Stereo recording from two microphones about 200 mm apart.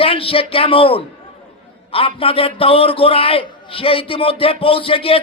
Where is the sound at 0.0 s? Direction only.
30° left (ahead or behind).